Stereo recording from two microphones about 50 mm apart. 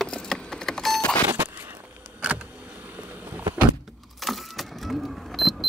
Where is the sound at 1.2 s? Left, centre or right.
Right.